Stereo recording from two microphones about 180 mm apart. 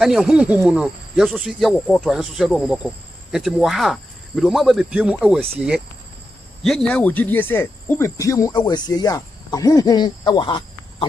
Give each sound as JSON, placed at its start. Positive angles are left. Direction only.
{"t": 0.0, "sound": "speech", "side_deg": -5}
{"t": 6.6, "sound": "cricket", "side_deg": 5}